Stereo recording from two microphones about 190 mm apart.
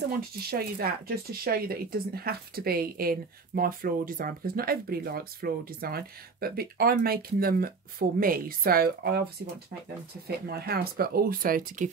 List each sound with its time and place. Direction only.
0.5 s speech: 55° right (ahead or behind)